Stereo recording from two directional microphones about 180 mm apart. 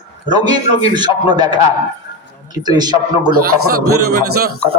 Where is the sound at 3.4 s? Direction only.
60° right (ahead or behind).